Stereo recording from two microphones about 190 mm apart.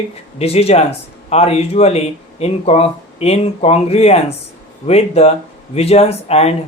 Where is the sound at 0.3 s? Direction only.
30° left (ahead or behind).